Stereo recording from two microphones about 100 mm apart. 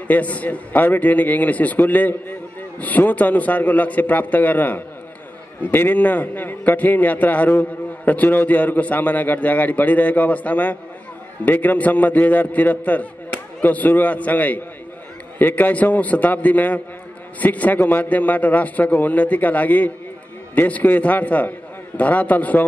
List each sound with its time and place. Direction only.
0.1 s a man's voice: 15° left (ahead or behind)